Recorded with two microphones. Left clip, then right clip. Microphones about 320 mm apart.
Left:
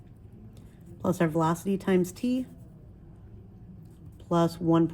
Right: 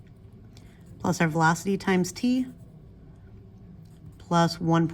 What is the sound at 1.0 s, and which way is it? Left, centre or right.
Speech, right.